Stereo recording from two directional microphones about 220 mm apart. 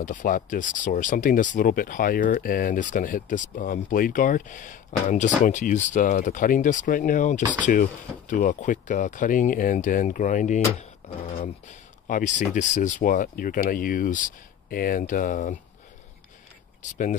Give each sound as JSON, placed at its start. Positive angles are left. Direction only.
{"t": 0.0, "sound": "speech", "side_deg": 35}
{"t": 12.1, "sound": "speech", "side_deg": 35}